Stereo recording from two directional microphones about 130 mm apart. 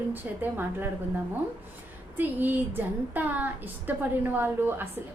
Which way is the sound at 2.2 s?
15° right (ahead or behind).